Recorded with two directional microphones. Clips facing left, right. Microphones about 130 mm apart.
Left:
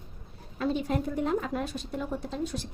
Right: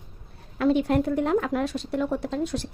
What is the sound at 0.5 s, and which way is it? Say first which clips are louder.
A woman's voice: right 7 dB; 70° right (ahead or behind).